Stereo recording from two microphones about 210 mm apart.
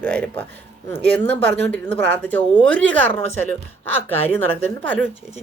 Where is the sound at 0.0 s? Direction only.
5° left (ahead or behind).